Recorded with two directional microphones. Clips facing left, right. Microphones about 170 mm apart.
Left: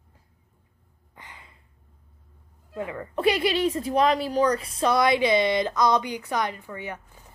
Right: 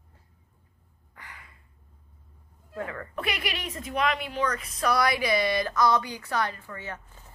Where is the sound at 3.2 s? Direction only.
30° left (ahead or behind).